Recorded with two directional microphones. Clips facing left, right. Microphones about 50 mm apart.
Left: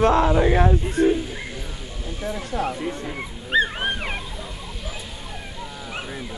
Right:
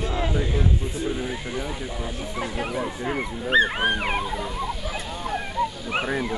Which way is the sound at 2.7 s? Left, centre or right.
Right.